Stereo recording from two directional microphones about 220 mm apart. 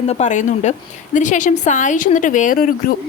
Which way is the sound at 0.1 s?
35° left (ahead or behind).